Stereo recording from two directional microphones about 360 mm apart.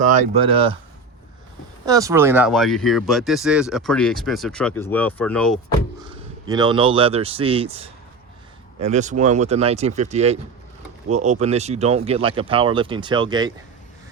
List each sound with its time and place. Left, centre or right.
0.2 s speech: centre
1.8 s speech: centre
6.1 s speech: centre